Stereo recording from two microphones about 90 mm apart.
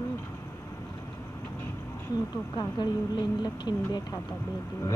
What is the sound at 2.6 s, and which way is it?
Speech, 55° left (ahead or behind).